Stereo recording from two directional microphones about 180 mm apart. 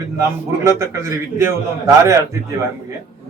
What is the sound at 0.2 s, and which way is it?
Speech, 15° right (ahead or behind).